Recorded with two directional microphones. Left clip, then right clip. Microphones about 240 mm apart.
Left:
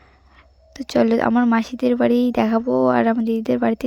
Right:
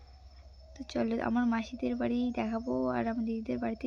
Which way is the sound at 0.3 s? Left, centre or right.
Left.